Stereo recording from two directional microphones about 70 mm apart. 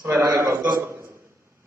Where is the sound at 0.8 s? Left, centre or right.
Right.